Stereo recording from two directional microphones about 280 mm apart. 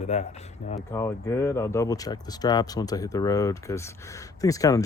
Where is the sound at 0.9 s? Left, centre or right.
Centre.